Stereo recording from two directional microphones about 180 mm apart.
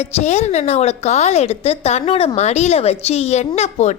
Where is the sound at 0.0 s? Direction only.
40° left (ahead or behind).